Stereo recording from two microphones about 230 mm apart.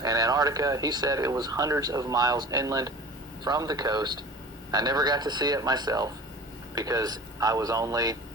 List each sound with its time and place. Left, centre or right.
0.0 s speech: centre